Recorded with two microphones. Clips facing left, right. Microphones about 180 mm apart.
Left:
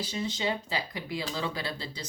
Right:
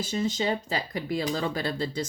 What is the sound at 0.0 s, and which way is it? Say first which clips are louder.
Speech: right 4 dB; 45° right (ahead or behind).